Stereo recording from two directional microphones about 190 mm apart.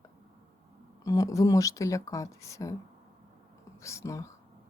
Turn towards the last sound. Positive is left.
turn(degrees=15)  # may be behind; listen again after turning